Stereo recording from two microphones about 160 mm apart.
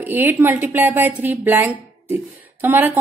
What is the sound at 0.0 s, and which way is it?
A woman's voice, 10° right (ahead or behind).